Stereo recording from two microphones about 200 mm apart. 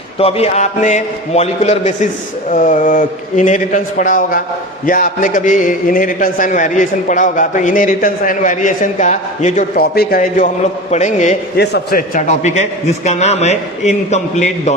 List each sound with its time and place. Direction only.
0.2 s a man's voice: 30° left (ahead or behind)
11.5 s a man's voice: 55° left (ahead or behind); by 14.8 s 35° left (ahead or behind)